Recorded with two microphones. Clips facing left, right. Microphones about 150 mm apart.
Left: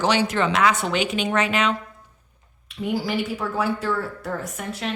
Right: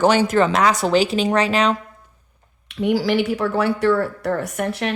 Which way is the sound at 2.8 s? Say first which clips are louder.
Right 6 dB; 80° right.